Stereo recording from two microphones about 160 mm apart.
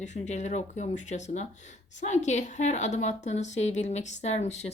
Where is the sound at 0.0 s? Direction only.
50° left (ahead or behind).